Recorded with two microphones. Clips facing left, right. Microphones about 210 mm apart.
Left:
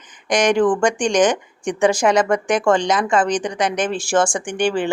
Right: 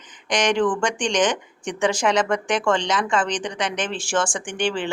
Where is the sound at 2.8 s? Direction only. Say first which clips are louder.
Left 5 dB; 40° left (ahead or behind).